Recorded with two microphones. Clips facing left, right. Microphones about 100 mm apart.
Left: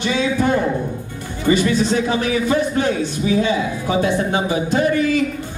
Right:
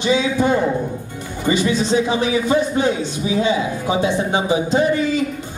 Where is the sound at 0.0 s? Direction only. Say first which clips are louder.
Right 1 dB; 20° right (ahead or behind).